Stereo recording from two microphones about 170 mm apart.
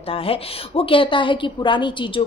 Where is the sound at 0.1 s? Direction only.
35° left (ahead or behind).